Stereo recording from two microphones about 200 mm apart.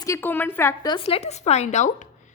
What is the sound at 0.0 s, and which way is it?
A woman's voice, 10° left (ahead or behind).